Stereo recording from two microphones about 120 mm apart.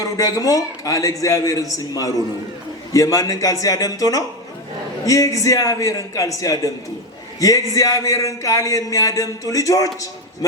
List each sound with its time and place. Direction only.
0.0 s a man's voice: 30° left (ahead or behind)